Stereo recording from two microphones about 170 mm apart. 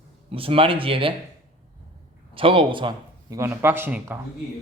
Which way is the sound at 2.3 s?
30° right (ahead or behind).